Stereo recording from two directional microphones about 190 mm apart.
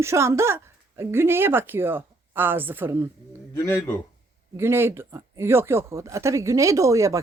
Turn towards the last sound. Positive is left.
turn(degrees=-15)  # may be behind; listen again after turning